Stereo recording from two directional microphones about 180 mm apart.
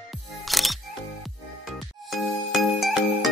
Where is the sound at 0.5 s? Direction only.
Centre (ahead or behind).